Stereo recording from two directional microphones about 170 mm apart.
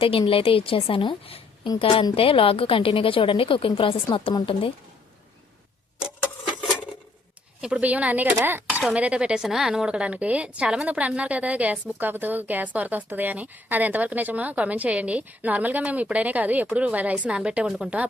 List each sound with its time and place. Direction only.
0.0 s a woman's voice: 30° left (ahead or behind)
7.6 s speech: 5° right (ahead or behind)